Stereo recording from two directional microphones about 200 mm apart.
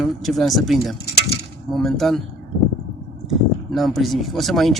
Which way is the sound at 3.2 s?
Centre (ahead or behind).